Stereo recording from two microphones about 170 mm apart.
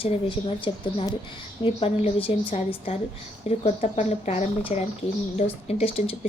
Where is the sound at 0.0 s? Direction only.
30° left (ahead or behind).